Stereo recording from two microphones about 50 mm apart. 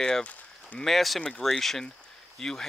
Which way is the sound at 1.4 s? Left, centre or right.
Centre.